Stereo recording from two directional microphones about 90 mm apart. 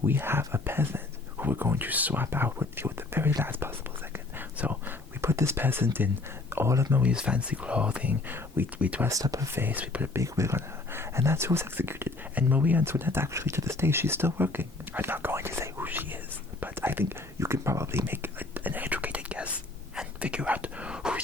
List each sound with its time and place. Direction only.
0.0 s speech: 25° right (ahead or behind)
7.0 s speech: 10° right (ahead or behind)
9.0 s speech: 40° right (ahead or behind)
9.5 s speech: 25° right (ahead or behind)
10.2 s speech: 35° right (ahead or behind)
18.0 s whispering: 25° right (ahead or behind)